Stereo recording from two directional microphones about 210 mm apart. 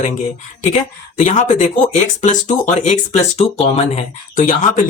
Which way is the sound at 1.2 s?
35° left (ahead or behind).